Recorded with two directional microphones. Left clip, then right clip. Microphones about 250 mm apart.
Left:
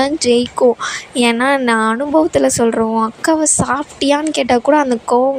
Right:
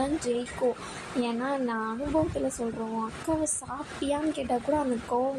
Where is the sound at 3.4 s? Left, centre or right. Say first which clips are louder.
Left 18 dB; left.